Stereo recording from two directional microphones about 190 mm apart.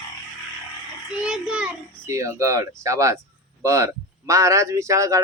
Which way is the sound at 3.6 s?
15° right (ahead or behind).